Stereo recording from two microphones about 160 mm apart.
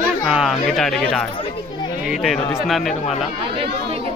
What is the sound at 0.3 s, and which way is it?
Speech, 5° right (ahead or behind).